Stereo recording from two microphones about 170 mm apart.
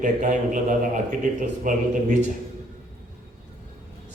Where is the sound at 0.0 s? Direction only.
50° right (ahead or behind).